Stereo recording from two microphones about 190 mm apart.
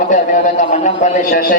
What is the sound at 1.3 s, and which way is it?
Speech, 55° left (ahead or behind).